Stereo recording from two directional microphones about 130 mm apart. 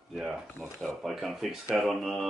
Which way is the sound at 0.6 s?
Centre (ahead or behind).